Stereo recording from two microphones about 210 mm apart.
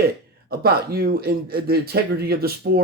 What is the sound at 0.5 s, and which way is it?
A man's voice, 45° right (ahead or behind).